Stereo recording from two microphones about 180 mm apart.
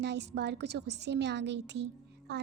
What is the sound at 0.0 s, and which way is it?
A woman's voice, 70° right (ahead or behind).